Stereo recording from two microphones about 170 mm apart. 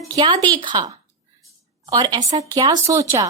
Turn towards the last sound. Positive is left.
turn(degrees=-20)  # may be behind; listen again after turning